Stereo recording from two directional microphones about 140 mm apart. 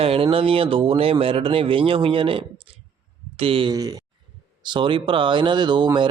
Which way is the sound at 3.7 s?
25° right (ahead or behind).